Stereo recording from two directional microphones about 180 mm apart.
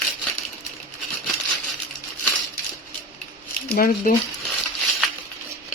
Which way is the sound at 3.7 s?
55° left (ahead or behind).